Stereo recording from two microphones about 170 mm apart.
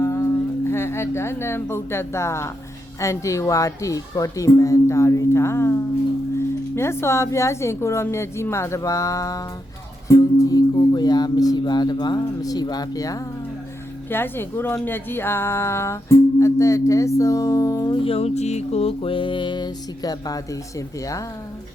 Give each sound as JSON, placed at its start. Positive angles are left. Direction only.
{"t": 0.0, "sound": "music", "side_deg": 15}
{"t": 0.7, "sound": "speech", "side_deg": 15}
{"t": 6.7, "sound": "speech", "side_deg": 15}
{"t": 10.1, "sound": "music", "side_deg": 20}
{"t": 14.1, "sound": "speech", "side_deg": 15}
{"t": 18.0, "sound": "music", "side_deg": 35}